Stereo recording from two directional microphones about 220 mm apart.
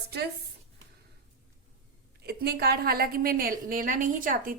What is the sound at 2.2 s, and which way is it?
A woman's voice, 45° right (ahead or behind).